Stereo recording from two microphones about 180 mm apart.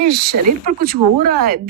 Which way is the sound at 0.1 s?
50° right (ahead or behind).